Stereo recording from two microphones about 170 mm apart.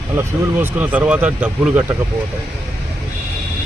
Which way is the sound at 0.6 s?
10° right (ahead or behind).